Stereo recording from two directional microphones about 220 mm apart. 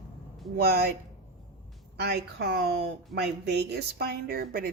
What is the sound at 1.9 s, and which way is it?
Speech, 45° right (ahead or behind).